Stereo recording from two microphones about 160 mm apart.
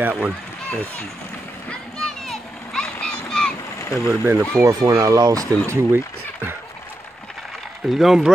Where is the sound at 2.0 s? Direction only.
5° left (ahead or behind).